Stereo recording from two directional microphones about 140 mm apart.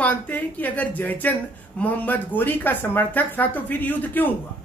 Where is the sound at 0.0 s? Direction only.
10° left (ahead or behind).